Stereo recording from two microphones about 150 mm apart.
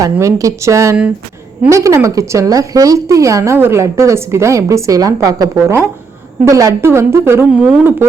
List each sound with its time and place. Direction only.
0.0 s a woman's voice: 20° right (ahead or behind)